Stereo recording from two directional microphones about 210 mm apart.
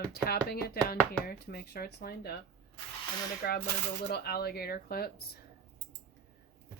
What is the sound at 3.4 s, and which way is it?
Speech, 50° left (ahead or behind).